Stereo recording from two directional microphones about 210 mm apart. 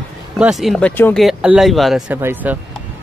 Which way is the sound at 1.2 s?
Centre (ahead or behind).